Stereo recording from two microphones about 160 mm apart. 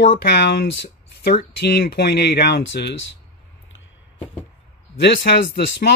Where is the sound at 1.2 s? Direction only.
80° left.